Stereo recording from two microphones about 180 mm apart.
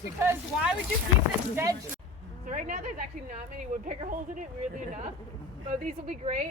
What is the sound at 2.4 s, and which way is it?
A woman's voice, 45° right (ahead or behind).